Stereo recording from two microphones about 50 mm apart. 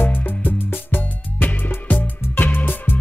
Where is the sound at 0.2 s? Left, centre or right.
Left.